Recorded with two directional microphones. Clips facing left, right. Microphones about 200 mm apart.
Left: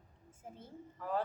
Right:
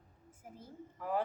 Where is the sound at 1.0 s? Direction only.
15° right (ahead or behind).